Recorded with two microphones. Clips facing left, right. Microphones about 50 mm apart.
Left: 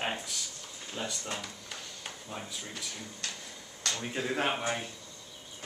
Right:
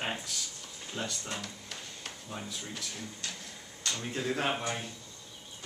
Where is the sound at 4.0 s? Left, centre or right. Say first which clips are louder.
Left 1 dB; centre.